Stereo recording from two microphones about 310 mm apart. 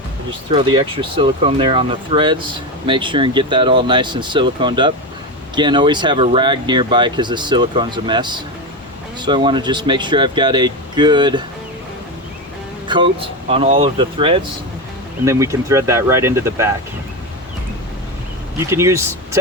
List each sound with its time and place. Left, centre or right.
0.5 s speech: centre
12.9 s speech: centre
18.5 s speech: centre